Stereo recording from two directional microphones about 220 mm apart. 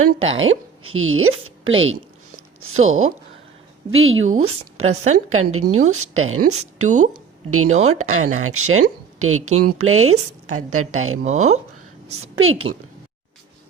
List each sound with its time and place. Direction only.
0.2 s a woman's voice: 65° right (ahead or behind)
4.4 s speech: 75° right (ahead or behind)
11.0 s speech: 70° right (ahead or behind)
11.3 s speech: 30° right (ahead or behind)
12.4 s speech: 65° right (ahead or behind)